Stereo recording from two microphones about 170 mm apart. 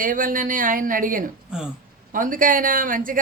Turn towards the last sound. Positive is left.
turn(degrees=-55)  # may be behind; listen again after turning